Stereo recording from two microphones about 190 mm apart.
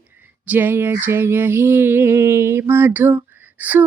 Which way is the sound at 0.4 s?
10° right (ahead or behind).